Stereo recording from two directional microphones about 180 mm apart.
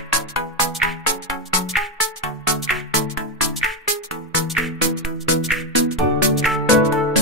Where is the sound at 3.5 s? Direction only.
Centre (ahead or behind).